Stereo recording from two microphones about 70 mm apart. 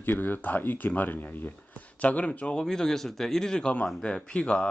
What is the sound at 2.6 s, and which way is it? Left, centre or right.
Speech, centre.